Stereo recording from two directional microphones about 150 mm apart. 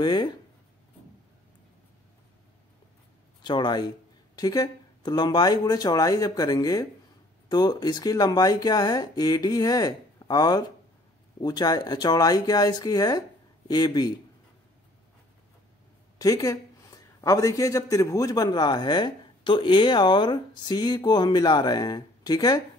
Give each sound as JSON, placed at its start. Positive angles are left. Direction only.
{"t": 0.0, "sound": "a man's voice", "side_deg": 30}
{"t": 3.4, "sound": "a man's voice", "side_deg": 30}
{"t": 16.2, "sound": "a man's voice", "side_deg": 25}